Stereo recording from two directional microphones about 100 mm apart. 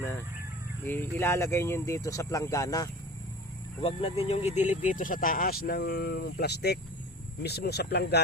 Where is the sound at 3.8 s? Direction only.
65° left (ahead or behind); by 4.4 s 90° left.